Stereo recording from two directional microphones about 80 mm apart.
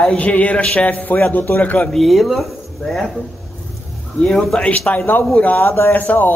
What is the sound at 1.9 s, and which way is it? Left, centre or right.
Speech, centre.